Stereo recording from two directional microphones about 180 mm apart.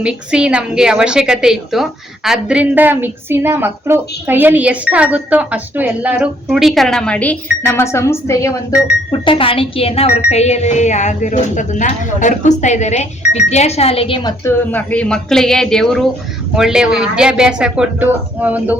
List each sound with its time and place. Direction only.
0.0 s a woman's voice: 5° right (ahead or behind); by 8.5 s 15° left (ahead or behind)
9.1 s a woman's voice: 30° left (ahead or behind); by 18.8 s 10° right (ahead or behind)